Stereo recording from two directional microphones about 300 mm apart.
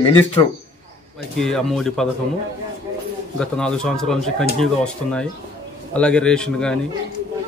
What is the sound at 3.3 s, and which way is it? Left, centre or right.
A man's voice, centre.